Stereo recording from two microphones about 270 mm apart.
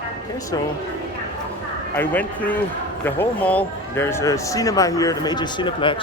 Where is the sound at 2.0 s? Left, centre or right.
Centre.